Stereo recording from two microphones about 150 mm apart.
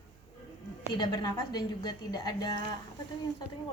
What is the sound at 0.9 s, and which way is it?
A woman's voice, 30° left (ahead or behind).